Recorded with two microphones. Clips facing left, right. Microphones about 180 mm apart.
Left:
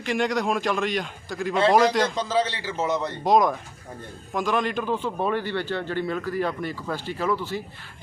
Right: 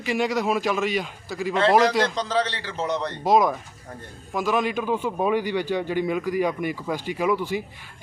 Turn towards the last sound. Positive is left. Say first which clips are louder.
# right 3 dB
turn(degrees=-15)  # may be behind; listen again after turning